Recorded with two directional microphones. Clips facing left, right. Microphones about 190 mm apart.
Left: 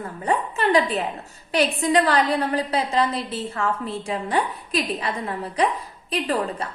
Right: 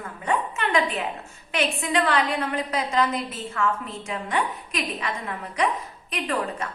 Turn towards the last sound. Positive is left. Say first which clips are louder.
# left 3 dB
turn(degrees=35)  # may be behind; listen again after turning